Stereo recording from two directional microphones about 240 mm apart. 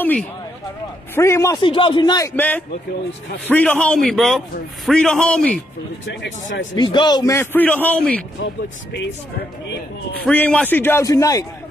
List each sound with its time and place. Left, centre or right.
0.0 s a man's voice: centre
6.0 s speech: left
6.7 s a man's voice: centre
10.2 s a man's voice: centre